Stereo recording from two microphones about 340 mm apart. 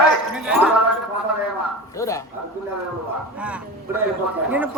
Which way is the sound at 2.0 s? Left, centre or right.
Centre.